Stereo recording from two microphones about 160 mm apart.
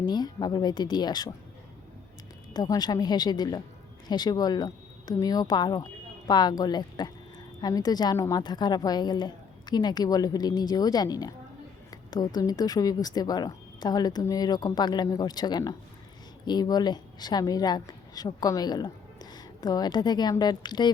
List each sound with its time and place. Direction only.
0.0 s a woman's voice: 25° left (ahead or behind)
2.5 s a woman's voice: 25° left (ahead or behind)